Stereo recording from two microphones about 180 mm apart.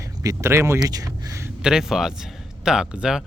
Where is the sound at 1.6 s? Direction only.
5° right (ahead or behind).